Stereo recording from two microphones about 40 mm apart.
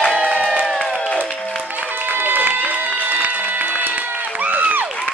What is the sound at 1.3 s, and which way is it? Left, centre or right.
Music, left.